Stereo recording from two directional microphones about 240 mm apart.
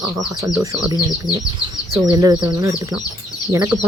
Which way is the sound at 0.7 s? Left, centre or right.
Centre.